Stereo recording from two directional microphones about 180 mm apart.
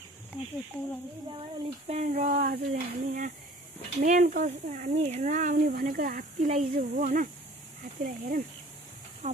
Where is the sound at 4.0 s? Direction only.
45° right (ahead or behind).